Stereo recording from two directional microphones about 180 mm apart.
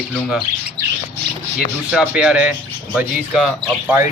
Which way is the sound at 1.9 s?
5° right (ahead or behind).